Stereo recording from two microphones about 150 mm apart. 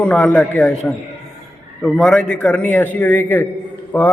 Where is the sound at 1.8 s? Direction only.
Centre (ahead or behind).